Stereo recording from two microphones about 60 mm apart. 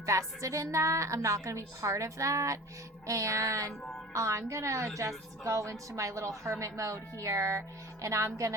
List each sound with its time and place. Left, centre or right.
0.0 s a woman's voice: right